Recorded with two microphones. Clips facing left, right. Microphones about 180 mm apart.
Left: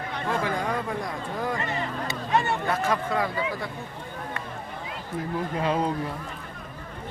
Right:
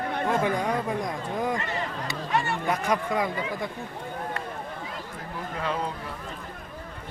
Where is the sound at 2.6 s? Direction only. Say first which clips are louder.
Even; 15° right (ahead or behind).